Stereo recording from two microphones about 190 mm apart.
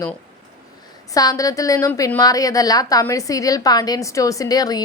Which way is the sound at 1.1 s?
20° left (ahead or behind).